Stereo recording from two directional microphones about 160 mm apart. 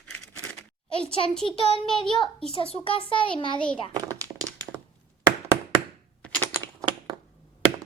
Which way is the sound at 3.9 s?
20° right (ahead or behind).